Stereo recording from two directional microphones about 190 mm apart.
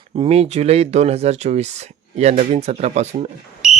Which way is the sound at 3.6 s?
5° right (ahead or behind).